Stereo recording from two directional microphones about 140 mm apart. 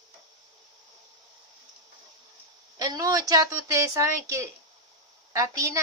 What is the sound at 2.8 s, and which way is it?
A woman's voice, 25° right (ahead or behind).